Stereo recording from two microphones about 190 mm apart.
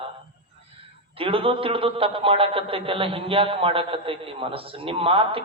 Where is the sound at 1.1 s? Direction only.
30° right (ahead or behind).